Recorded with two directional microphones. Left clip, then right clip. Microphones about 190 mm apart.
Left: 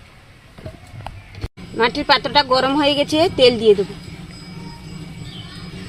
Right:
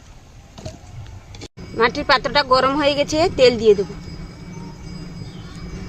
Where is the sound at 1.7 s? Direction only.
35° left (ahead or behind).